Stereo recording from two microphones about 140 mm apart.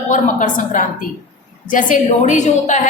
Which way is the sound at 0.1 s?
65° left (ahead or behind).